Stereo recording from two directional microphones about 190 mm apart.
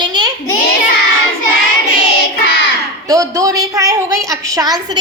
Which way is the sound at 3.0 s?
20° right (ahead or behind).